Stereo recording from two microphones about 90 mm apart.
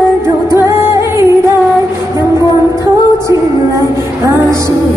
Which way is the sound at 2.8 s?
35° right (ahead or behind).